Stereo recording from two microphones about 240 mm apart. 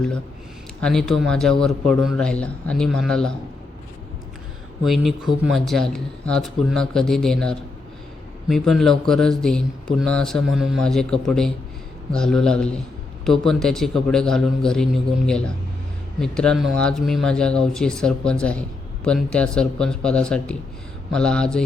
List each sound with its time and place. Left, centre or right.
0.8 s speech: centre
4.8 s speech: centre